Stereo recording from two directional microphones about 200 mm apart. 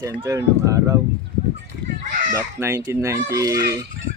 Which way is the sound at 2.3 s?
15° right (ahead or behind).